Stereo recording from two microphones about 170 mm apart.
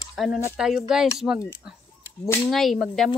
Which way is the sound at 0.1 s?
Centre (ahead or behind).